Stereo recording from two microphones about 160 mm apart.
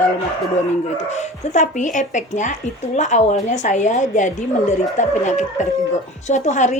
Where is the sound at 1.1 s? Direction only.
45° left (ahead or behind).